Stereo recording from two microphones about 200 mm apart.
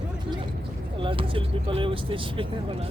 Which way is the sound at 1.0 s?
25° right (ahead or behind).